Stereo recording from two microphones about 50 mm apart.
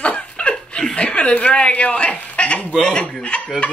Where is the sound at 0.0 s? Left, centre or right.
Left.